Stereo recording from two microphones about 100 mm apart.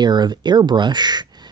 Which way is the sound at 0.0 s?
45° right (ahead or behind).